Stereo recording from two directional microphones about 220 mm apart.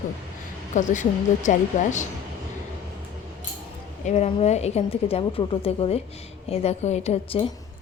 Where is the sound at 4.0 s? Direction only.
30° left (ahead or behind).